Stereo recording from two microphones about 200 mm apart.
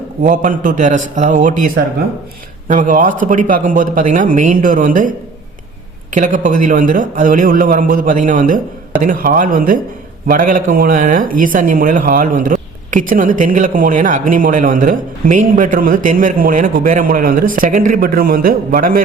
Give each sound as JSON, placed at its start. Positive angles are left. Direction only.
{"t": 0.2, "sound": "speech", "side_deg": -40}
{"t": 6.1, "sound": "speech", "side_deg": -40}